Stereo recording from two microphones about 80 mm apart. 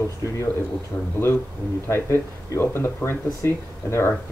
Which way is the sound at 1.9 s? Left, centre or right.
Left.